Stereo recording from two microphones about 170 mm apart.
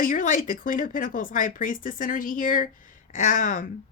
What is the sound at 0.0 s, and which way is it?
Speech, 50° left (ahead or behind).